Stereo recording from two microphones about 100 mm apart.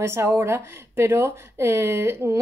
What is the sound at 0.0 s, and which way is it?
Speech, 25° right (ahead or behind).